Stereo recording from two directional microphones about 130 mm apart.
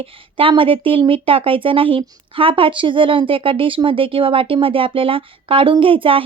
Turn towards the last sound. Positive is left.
turn(degrees=-45)  # may be behind; listen again after turning